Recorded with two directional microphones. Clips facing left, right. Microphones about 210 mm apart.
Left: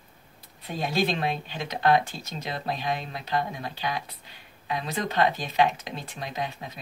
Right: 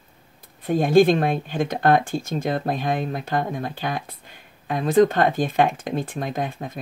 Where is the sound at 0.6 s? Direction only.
50° right (ahead or behind).